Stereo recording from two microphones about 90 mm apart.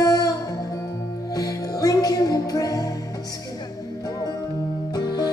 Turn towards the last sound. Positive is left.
turn(degrees=50)  # may be behind; listen again after turning